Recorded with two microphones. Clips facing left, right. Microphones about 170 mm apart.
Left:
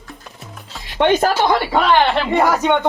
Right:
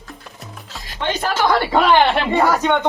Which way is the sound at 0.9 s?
60° left (ahead or behind).